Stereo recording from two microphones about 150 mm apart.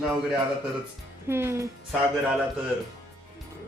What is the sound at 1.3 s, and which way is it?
Speech, 15° right (ahead or behind).